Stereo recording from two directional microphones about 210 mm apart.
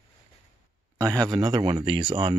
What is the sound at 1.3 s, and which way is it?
Speech, 20° right (ahead or behind).